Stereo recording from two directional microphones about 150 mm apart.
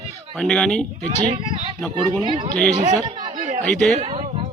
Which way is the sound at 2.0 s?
35° right (ahead or behind).